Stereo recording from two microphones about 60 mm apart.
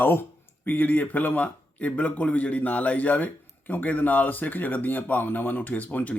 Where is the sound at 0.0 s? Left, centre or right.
Left.